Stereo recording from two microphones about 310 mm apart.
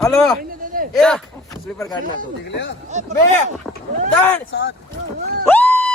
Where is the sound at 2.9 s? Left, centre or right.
Right.